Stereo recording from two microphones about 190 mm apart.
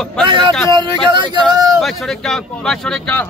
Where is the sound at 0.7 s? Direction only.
25° right (ahead or behind).